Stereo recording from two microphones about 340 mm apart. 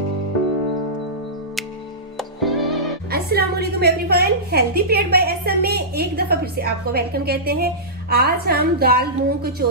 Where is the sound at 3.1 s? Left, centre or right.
Right.